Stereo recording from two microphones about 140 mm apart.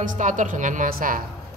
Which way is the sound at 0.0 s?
70° right (ahead or behind).